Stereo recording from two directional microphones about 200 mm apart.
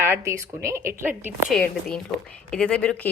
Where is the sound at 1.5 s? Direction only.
5° left (ahead or behind).